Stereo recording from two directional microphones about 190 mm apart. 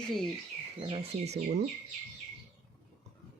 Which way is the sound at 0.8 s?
30° right (ahead or behind).